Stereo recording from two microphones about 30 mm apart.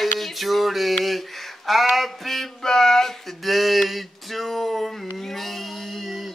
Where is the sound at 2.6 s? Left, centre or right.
Centre.